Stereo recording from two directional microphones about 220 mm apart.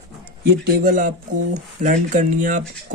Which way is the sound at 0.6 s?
40° right (ahead or behind).